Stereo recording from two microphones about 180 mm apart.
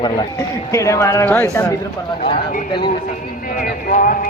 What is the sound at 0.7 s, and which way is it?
Speech, 15° left (ahead or behind).